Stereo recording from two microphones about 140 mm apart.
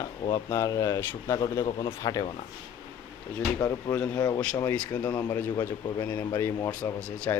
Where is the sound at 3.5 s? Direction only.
25° left (ahead or behind).